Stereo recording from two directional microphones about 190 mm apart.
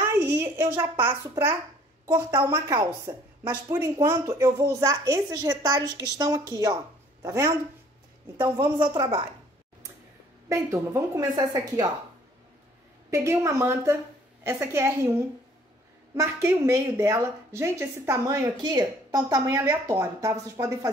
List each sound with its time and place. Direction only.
0.0 s a sound: 10° right (ahead or behind)
2.0 s a woman's voice: 15° right (ahead or behind)
10.5 s a woman's voice: 15° right (ahead or behind)
13.1 s a woman's voice: 15° right (ahead or behind)